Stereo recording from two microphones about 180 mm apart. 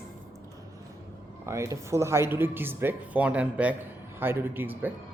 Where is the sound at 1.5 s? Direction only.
15° right (ahead or behind).